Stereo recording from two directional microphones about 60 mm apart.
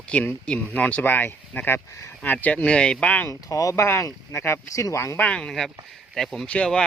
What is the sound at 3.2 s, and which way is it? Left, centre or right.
Speech, left.